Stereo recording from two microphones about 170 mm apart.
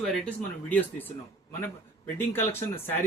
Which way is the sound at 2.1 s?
10° left (ahead or behind).